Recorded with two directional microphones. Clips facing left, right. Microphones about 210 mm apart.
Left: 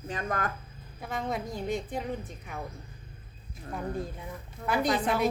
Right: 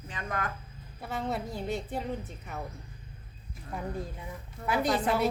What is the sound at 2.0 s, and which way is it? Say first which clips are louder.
Speech: even; centre (ahead or behind).